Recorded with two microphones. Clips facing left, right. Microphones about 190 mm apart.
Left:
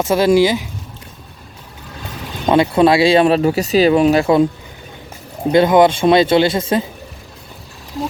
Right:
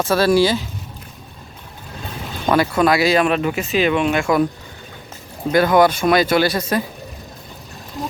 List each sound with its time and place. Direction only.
0.0 s speech: 20° left (ahead or behind)
2.5 s speech: 25° left (ahead or behind)
5.5 s speech: 20° left (ahead or behind)